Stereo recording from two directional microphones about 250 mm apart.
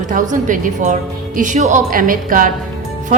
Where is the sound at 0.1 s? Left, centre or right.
Right.